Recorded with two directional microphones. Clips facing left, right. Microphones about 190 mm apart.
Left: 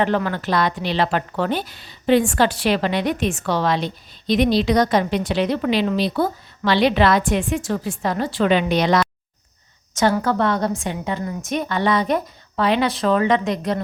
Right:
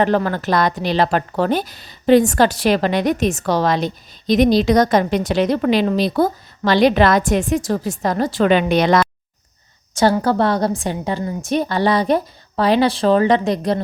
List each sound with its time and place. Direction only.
0.0 s a woman's voice: 40° right (ahead or behind)
9.9 s a woman's voice: 35° right (ahead or behind)